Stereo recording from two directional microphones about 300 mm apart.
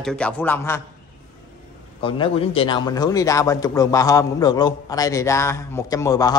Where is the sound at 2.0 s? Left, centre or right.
Centre.